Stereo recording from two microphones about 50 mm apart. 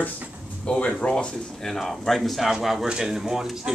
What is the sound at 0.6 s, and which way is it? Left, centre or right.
Speech, left.